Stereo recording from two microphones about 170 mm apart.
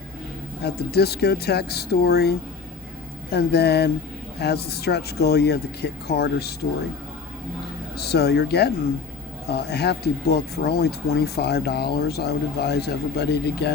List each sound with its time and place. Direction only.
0.6 s speech: 70° left (ahead or behind)
7.9 s speech: 70° left (ahead or behind)